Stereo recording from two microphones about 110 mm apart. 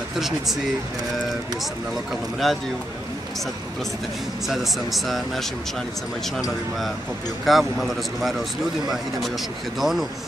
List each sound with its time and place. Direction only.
2.4 s speech: centre (ahead or behind)
4.5 s speech: centre (ahead or behind)
7.4 s speech: centre (ahead or behind)